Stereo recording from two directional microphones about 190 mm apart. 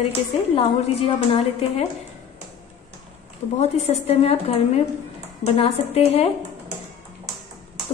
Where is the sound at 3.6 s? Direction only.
35° left (ahead or behind).